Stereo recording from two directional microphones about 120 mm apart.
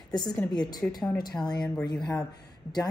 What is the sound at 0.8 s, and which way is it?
Speech, 10° left (ahead or behind).